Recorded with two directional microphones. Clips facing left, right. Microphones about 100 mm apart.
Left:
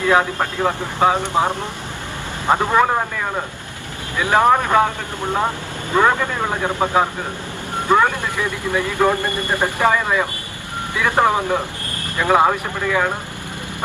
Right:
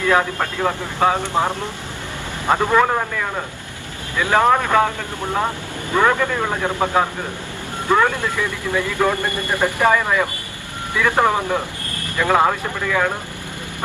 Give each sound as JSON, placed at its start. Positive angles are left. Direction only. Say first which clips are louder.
{"t": 0.1, "sound": "speech", "louder": "left 1 dB", "side_deg": 15}